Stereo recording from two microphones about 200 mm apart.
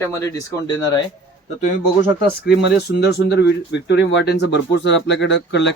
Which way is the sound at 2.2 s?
55° left (ahead or behind).